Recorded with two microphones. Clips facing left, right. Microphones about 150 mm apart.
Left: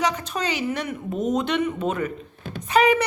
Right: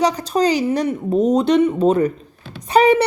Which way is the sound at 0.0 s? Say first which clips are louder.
Right 8 dB; 35° right (ahead or behind).